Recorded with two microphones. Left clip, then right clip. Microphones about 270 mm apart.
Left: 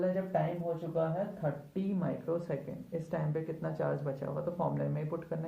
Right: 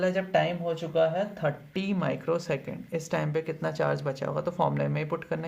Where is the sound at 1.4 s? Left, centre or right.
Right.